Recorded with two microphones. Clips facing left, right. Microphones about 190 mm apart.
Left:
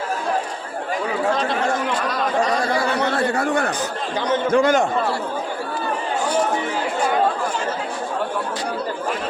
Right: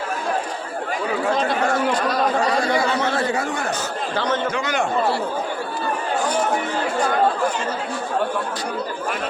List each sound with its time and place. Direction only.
3.0 s chatter: 60° left (ahead or behind)
4.5 s a man's voice: 50° left (ahead or behind)